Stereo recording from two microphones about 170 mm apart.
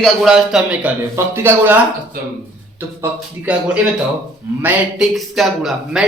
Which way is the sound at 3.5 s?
10° right (ahead or behind).